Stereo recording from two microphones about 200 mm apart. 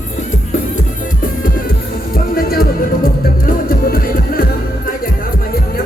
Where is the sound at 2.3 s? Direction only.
50° left (ahead or behind).